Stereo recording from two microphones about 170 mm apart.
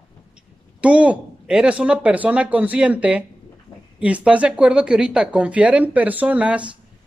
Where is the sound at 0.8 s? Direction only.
5° right (ahead or behind).